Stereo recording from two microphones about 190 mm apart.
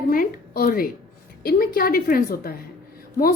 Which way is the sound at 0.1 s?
50° left (ahead or behind).